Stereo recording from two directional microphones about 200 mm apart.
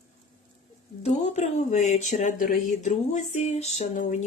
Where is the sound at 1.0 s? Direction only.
35° left (ahead or behind).